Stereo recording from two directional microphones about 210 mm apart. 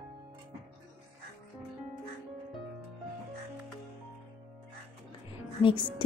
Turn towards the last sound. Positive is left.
turn(degrees=25)  # may be behind; listen again after turning